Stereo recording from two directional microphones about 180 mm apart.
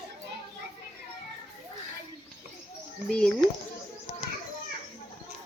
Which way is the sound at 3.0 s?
5° left (ahead or behind).